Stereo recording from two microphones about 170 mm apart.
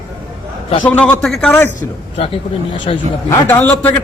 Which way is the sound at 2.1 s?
35° left (ahead or behind).